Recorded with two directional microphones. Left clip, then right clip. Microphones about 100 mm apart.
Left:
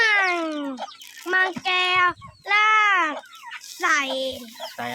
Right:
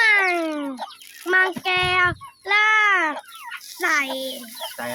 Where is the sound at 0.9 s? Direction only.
5° right (ahead or behind).